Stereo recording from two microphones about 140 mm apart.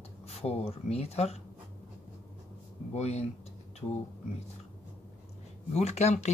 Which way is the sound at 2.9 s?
50° left (ahead or behind).